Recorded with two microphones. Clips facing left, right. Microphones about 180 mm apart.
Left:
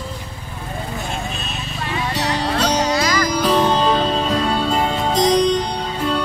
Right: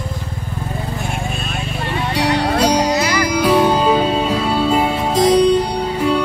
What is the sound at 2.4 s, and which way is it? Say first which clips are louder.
Music: right 2 dB; 10° right (ahead or behind).